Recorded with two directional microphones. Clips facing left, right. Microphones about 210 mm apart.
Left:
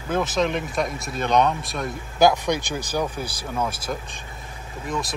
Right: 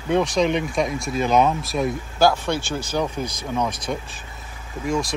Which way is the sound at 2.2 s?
15° left (ahead or behind).